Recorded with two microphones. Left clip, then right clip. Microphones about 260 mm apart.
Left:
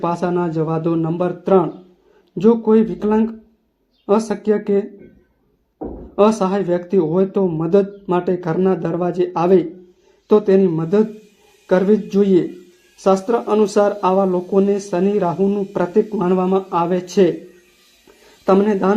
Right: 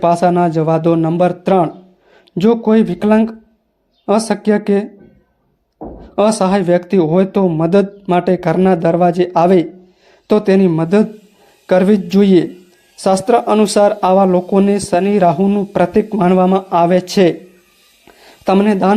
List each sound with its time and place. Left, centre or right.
0.0 s speech: right
6.1 s speech: right
18.4 s speech: right